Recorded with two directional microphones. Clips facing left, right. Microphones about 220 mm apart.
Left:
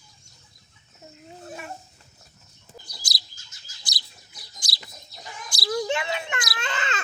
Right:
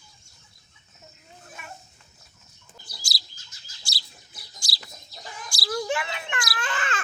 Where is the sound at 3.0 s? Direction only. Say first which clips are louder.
Even; 20° left (ahead or behind).